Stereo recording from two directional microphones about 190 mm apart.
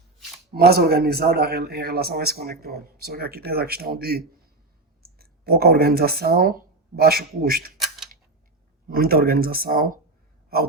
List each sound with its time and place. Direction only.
0.5 s speech: 55° right (ahead or behind)
7.8 s a sound: centre (ahead or behind)
8.9 s speech: 50° right (ahead or behind)